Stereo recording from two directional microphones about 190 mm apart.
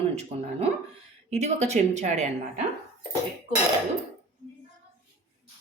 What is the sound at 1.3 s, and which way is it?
Speech, 35° right (ahead or behind).